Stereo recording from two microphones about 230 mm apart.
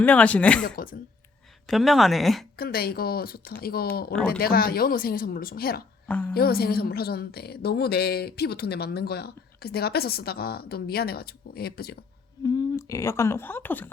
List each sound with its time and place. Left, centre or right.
0.0 s speech: centre
0.6 s speech: left
1.6 s speech: centre
2.6 s speech: left
6.1 s speech: centre
6.3 s a woman's voice: left
12.4 s a woman's voice: centre